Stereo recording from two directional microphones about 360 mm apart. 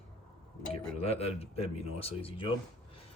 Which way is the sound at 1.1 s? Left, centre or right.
Centre.